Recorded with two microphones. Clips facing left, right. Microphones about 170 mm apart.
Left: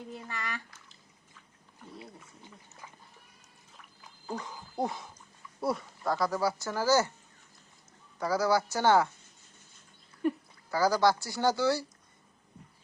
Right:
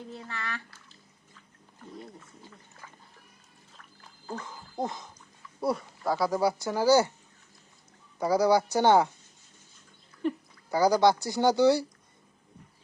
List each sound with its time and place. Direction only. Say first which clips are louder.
0.1 s speech: even; 10° left (ahead or behind)
1.8 s speech: right 3 dB; 5° left (ahead or behind)
4.3 s speech: even; 15° left (ahead or behind); by 7.1 s 15° right (ahead or behind)
8.2 s speech: right 4 dB; 15° right (ahead or behind)
10.7 s speech: right 3 dB; 15° right (ahead or behind)